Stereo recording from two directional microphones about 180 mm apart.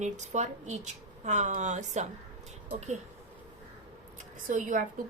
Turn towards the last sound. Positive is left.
turn(degrees=-45)  # may be behind; listen again after turning